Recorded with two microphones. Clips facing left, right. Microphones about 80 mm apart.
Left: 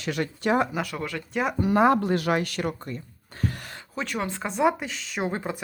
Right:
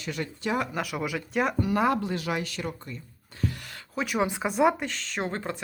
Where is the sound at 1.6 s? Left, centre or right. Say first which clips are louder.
Left 7 dB; left.